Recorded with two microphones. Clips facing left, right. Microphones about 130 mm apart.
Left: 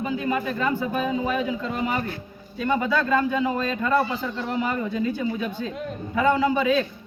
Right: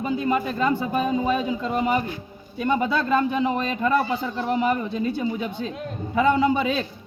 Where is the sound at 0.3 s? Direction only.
25° right (ahead or behind).